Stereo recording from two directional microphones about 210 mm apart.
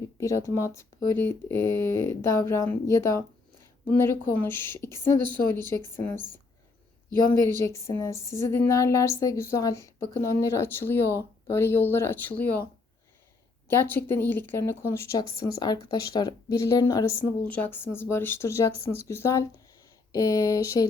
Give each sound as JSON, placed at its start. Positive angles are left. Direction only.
{"t": 0.2, "sound": "speech", "side_deg": 15}
{"t": 13.7, "sound": "speech", "side_deg": 10}